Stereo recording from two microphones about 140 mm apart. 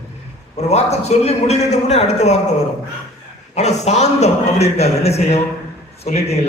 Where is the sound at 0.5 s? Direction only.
50° left (ahead or behind).